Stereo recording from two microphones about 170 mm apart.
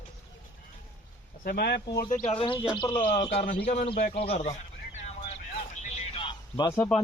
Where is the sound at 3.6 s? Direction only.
45° left (ahead or behind).